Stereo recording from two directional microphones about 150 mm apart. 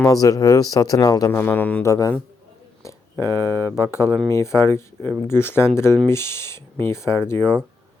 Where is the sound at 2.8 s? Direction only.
20° left (ahead or behind).